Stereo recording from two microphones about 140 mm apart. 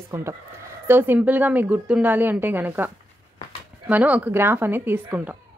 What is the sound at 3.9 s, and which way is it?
A woman's voice, 10° right (ahead or behind).